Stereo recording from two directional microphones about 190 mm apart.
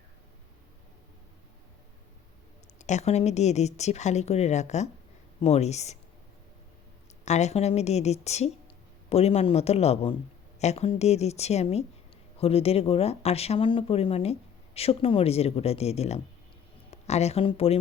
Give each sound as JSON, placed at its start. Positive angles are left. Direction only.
{"t": 2.7, "sound": "speech", "side_deg": 40}
{"t": 7.3, "sound": "speech", "side_deg": 35}